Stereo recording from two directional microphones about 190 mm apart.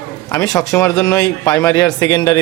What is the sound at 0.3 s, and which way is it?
A man's voice, 20° left (ahead or behind).